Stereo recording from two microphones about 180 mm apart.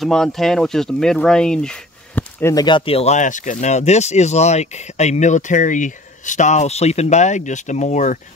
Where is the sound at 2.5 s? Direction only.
25° left (ahead or behind).